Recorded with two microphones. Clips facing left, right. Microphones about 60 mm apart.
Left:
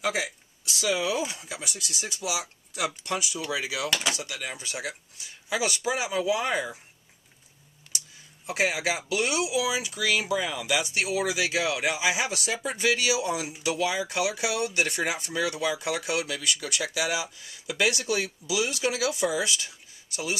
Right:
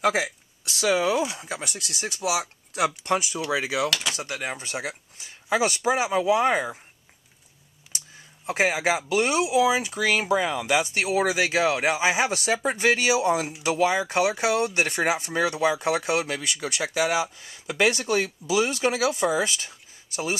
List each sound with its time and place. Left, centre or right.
0.7 s speech: right
1.1 s speech: centre
1.4 s speech: right
3.5 s speech: right
8.5 s speech: right